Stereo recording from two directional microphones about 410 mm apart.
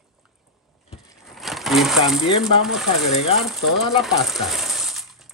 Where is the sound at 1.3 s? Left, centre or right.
Centre.